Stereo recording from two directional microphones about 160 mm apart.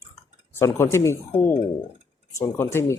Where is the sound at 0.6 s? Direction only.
15° left (ahead or behind).